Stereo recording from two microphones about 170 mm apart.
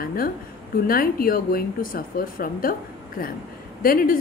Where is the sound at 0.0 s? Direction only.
60° left (ahead or behind).